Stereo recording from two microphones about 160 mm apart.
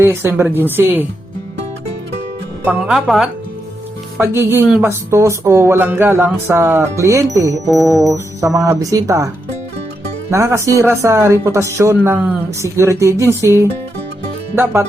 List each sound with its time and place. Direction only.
0.0 s speech: 15° right (ahead or behind)
2.6 s speech: 5° right (ahead or behind)
4.2 s speech: 15° right (ahead or behind)
7.7 s speech: centre (ahead or behind)
8.0 s speech: 20° right (ahead or behind)